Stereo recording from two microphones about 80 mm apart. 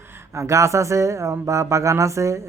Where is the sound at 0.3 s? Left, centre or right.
Right.